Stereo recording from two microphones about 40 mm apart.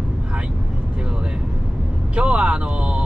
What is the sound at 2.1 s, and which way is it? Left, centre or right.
Speech, right.